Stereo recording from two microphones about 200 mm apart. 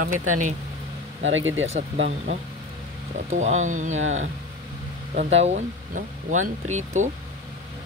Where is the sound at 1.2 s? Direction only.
75° right (ahead or behind).